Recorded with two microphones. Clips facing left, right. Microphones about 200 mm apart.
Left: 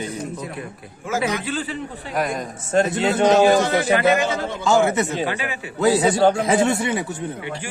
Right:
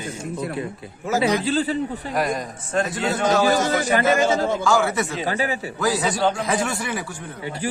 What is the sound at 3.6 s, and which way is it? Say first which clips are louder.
A man's voice: left 2 dB; 45° right (ahead or behind).